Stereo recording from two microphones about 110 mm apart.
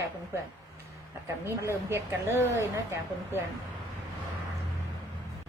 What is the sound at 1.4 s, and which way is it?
A woman's voice, 25° right (ahead or behind).